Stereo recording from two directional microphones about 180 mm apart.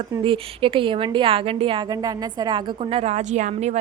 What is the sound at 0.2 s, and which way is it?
Speech, 30° right (ahead or behind).